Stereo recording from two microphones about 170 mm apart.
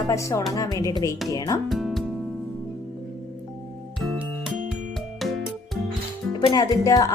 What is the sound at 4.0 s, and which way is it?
Music, centre (ahead or behind).